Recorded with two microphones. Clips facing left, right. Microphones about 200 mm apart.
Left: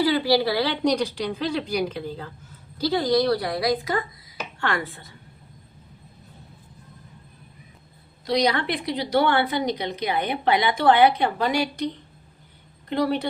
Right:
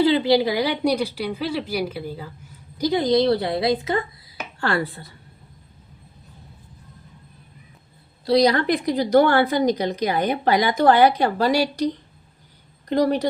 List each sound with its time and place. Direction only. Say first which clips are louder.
0.0 s a woman's voice: right 3 dB; 20° right (ahead or behind)
4.6 s a woman's voice: right 4 dB; 35° right (ahead or behind)
8.3 s a woman's voice: right 5 dB; 35° right (ahead or behind)
12.9 s a woman's voice: right 4 dB; 40° right (ahead or behind)